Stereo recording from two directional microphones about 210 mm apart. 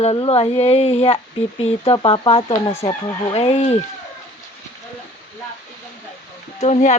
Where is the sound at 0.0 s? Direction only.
25° left (ahead or behind).